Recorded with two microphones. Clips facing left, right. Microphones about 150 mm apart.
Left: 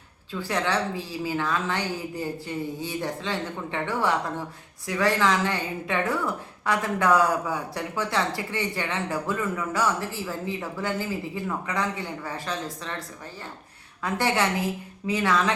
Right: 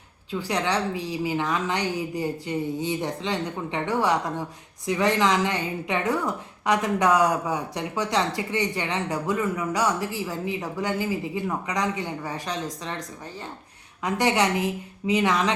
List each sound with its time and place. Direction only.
0.3 s a woman's voice: 15° right (ahead or behind)
14.0 s a woman's voice: 15° right (ahead or behind)